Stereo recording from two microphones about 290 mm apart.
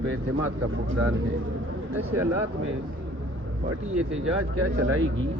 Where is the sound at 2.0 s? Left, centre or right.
Centre.